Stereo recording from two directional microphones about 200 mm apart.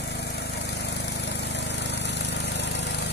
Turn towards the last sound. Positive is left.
turn(degrees=60)  # may be behind; listen again after turning